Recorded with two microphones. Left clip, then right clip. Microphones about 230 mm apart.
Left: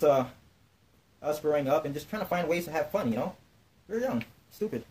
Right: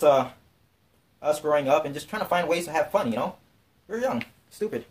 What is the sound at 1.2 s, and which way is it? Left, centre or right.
Speech, left.